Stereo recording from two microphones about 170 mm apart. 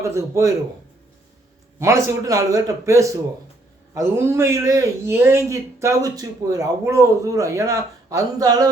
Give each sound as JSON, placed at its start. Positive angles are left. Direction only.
{"t": 0.0, "sound": "a man's voice", "side_deg": -15}
{"t": 1.8, "sound": "a man's voice", "side_deg": -20}